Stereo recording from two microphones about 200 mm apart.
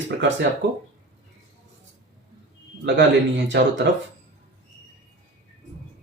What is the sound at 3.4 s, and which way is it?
Speech, 60° right (ahead or behind).